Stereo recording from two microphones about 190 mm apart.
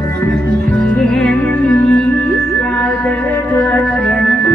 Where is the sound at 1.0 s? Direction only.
5° left (ahead or behind).